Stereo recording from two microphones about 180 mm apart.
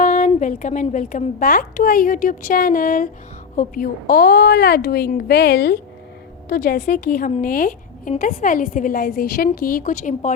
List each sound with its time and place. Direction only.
0.0 s a woman's voice: 45° left (ahead or behind)